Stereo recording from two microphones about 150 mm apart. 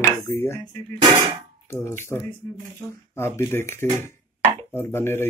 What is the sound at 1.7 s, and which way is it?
Speech, 15° left (ahead or behind).